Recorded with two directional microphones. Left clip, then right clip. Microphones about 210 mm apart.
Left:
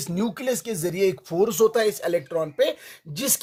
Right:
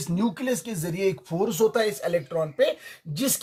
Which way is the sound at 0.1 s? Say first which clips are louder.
Left 1 dB; 45° left (ahead or behind).